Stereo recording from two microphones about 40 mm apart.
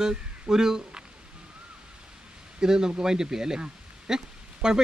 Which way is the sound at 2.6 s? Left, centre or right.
Centre.